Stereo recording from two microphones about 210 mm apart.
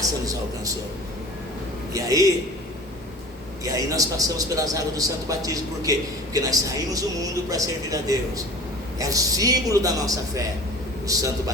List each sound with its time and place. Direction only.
1.9 s a man's voice: 15° right (ahead or behind)
3.6 s a man's voice: 15° right (ahead or behind)